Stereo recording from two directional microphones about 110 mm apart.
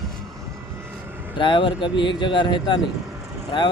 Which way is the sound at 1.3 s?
45° left (ahead or behind).